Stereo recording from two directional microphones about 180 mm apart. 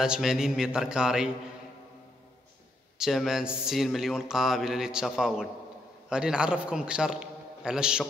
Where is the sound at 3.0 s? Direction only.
Centre (ahead or behind).